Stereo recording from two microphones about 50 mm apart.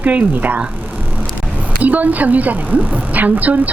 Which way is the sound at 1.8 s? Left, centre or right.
Right.